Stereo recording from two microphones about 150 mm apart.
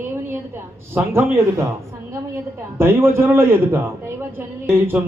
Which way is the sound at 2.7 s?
15° right (ahead or behind).